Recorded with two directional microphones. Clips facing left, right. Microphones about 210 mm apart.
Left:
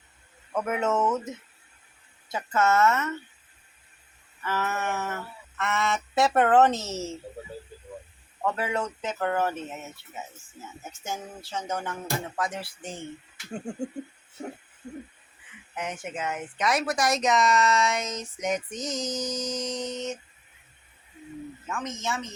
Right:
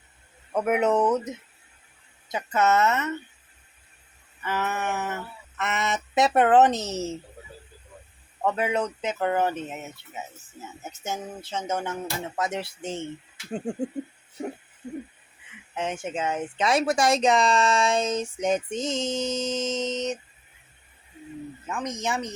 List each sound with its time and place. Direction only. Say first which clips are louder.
0.5 s speech: right 4 dB; 20° right (ahead or behind)
4.4 s speech: right 1 dB; 15° right (ahead or behind)
8.4 s speech: right 3 dB; 20° right (ahead or behind)
11.0 s speech: right 3 dB; 20° right (ahead or behind)
14.8 s speech: right 4 dB; 15° right (ahead or behind)
15.7 s speech: right 4 dB; 25° right (ahead or behind)
21.7 s speech: right 3 dB; 15° right (ahead or behind)